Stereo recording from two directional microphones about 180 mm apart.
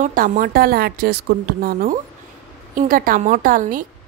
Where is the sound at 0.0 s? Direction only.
50° right (ahead or behind).